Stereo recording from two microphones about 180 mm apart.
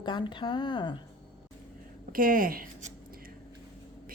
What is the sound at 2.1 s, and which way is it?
Speech, 50° right (ahead or behind).